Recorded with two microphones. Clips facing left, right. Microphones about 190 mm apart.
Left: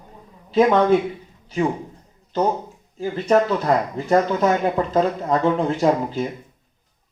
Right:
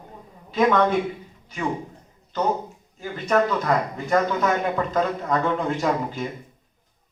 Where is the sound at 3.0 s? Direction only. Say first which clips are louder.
Left 4 dB; 30° left (ahead or behind).